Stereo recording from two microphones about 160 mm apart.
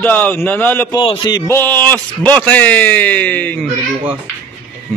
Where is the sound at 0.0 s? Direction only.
15° left (ahead or behind).